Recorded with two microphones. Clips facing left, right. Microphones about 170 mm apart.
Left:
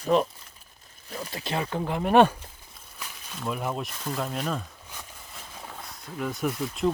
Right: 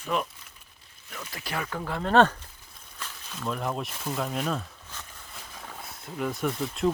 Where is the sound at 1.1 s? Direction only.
30° left (ahead or behind); by 4.7 s centre (ahead or behind).